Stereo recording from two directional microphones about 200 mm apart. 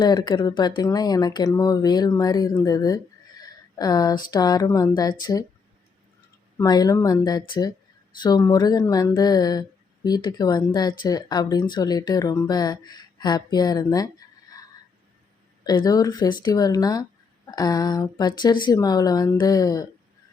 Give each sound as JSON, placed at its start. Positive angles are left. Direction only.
{"t": 0.0, "sound": "a woman's voice", "side_deg": 20}
{"t": 6.6, "sound": "speech", "side_deg": 20}
{"t": 15.6, "sound": "speech", "side_deg": 20}